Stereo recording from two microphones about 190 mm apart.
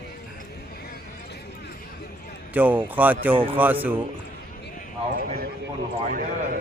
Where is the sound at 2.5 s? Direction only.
10° right (ahead or behind).